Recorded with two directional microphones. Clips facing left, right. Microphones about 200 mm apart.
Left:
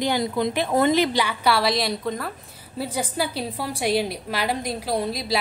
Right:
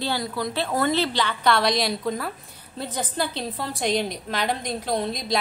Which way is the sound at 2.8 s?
10° left (ahead or behind).